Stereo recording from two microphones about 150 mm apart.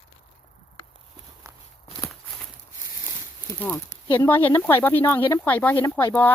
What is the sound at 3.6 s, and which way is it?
Speech, 15° left (ahead or behind).